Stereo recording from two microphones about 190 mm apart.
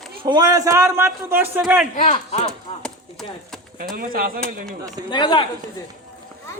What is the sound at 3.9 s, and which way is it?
Speech, 50° right (ahead or behind).